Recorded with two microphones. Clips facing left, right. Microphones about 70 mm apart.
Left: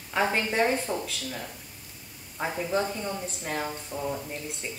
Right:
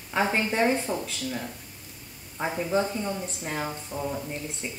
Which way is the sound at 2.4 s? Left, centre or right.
Centre.